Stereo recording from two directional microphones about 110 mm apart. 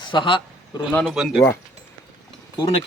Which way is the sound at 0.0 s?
45° left (ahead or behind).